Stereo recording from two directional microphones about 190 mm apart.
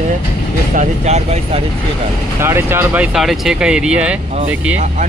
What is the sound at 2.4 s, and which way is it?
Speech, 10° right (ahead or behind).